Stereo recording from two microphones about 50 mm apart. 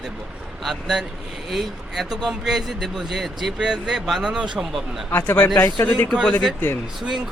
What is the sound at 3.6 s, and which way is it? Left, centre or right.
Speech, centre.